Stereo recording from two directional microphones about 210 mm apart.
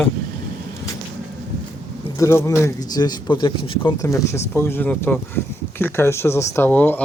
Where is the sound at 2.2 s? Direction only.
15° left (ahead or behind).